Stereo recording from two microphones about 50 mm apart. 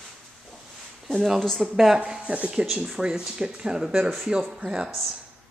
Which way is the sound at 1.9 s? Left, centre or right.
Right.